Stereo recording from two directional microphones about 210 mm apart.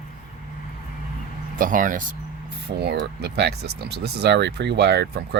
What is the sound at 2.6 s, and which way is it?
Speech, 50° right (ahead or behind).